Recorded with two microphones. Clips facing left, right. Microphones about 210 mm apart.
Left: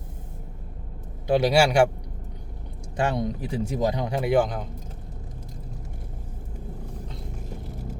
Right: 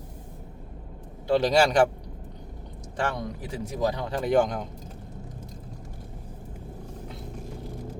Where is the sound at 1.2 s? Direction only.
10° left (ahead or behind).